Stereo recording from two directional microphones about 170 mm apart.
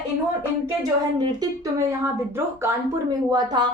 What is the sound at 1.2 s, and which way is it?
A woman's voice, 25° right (ahead or behind).